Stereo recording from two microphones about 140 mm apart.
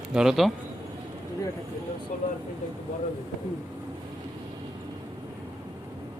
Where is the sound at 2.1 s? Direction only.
60° left (ahead or behind).